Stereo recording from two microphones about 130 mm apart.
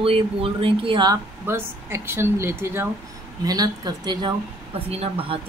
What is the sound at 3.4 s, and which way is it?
Speech, 30° right (ahead or behind).